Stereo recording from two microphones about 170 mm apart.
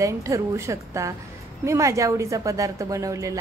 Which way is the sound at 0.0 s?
20° right (ahead or behind).